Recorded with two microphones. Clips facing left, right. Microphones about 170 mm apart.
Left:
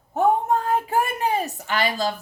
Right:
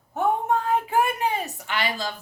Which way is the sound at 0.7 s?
40° left (ahead or behind).